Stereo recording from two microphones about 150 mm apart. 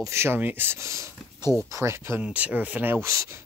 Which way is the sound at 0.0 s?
15° right (ahead or behind).